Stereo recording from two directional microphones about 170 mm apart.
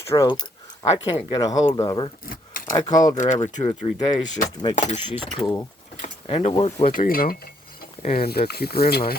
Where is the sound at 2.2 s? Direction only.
55° left (ahead or behind).